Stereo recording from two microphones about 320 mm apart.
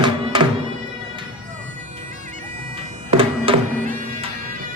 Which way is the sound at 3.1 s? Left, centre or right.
Centre.